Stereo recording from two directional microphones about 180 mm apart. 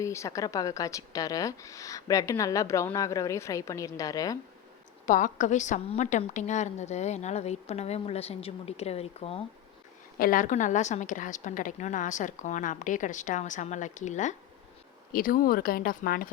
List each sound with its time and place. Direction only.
0.0 s a woman's voice: 15° left (ahead or behind)
5.0 s a woman's voice: 45° left (ahead or behind)
10.2 s a woman's voice: 50° left (ahead or behind)
15.1 s a woman's voice: 50° left (ahead or behind)